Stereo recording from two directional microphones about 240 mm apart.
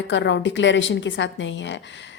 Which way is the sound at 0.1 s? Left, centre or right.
Left.